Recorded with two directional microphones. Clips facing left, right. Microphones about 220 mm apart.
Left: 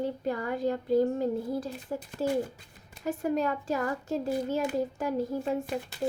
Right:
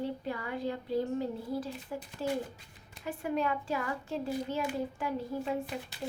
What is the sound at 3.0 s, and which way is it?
A woman's voice, 45° left (ahead or behind).